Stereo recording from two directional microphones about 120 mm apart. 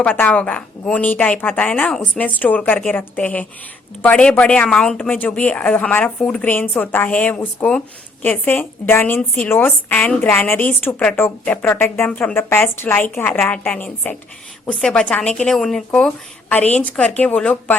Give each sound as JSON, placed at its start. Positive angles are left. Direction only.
{"t": 0.0, "sound": "a woman's voice", "side_deg": 15}